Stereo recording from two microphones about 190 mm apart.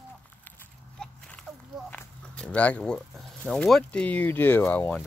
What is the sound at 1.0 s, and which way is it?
Walk, 5° left (ahead or behind).